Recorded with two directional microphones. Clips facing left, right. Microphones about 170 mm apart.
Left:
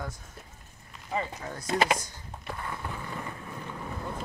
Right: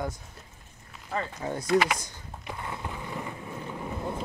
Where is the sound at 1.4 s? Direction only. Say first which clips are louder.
Right 6 dB; 20° right (ahead or behind).